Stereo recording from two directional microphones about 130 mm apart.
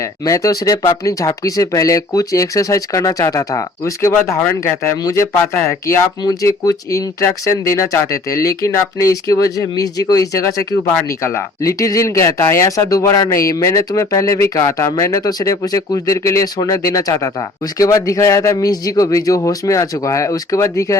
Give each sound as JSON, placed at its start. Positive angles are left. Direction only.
{"t": 0.0, "sound": "speech", "side_deg": 25}
{"t": 4.1, "sound": "speech", "side_deg": 15}